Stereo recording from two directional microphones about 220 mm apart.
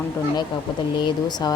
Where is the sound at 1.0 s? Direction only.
20° left (ahead or behind).